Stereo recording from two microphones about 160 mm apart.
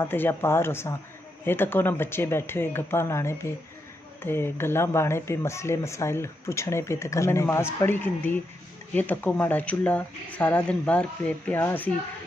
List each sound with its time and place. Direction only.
0.0 s speech: 15° left (ahead or behind)